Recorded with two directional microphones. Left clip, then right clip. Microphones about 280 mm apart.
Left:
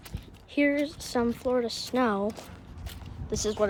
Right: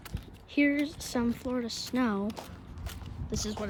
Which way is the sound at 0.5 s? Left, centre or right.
Centre.